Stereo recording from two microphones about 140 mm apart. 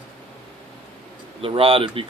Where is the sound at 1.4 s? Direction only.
40° right (ahead or behind).